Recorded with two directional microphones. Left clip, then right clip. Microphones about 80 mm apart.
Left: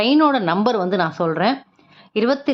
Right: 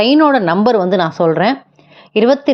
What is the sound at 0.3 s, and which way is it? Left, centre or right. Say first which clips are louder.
A woman's voice: right 6 dB; right.